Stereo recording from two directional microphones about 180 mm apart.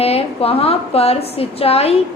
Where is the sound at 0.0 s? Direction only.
35° left (ahead or behind).